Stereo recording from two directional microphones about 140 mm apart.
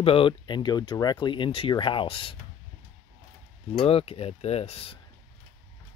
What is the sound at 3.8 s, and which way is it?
Speech, 45° left (ahead or behind).